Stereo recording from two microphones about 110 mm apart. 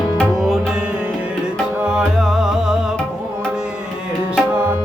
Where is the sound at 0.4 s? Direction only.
Centre (ahead or behind).